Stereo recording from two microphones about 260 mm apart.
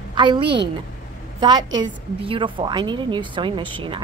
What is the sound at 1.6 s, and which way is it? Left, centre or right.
Speech, right.